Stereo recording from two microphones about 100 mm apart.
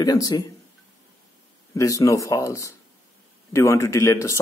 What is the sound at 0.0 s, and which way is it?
Speech, 40° left (ahead or behind).